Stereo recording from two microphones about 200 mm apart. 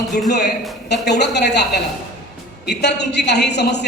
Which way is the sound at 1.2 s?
55° left (ahead or behind).